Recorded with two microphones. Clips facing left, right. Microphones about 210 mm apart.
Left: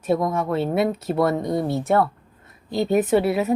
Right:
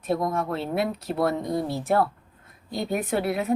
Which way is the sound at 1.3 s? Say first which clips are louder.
Left 4 dB; 60° left (ahead or behind).